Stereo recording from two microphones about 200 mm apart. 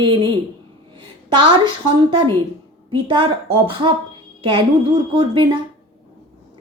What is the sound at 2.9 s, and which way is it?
Female singing, 25° right (ahead or behind).